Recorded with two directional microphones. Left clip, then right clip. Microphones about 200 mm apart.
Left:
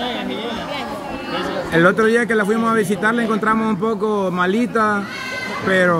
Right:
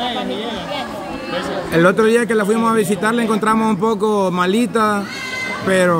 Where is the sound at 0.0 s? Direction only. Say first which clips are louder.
Right 2 dB; 45° right (ahead or behind).